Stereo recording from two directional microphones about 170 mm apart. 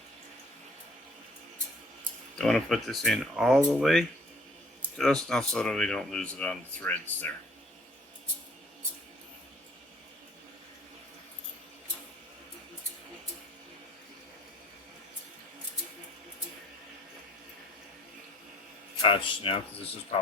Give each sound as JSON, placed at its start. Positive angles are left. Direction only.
{"t": 2.4, "sound": "speech", "side_deg": 0}
{"t": 19.0, "sound": "speech", "side_deg": 30}